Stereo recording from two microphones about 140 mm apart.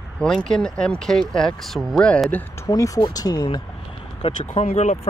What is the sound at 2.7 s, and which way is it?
Speech, 25° left (ahead or behind).